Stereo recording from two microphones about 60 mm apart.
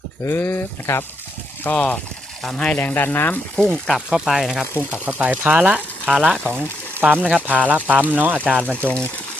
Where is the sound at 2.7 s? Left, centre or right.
Left.